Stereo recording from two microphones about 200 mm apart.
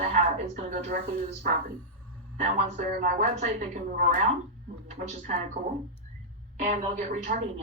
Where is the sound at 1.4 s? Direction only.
40° right (ahead or behind).